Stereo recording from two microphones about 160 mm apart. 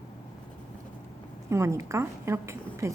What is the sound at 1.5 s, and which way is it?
A woman's voice, 15° right (ahead or behind).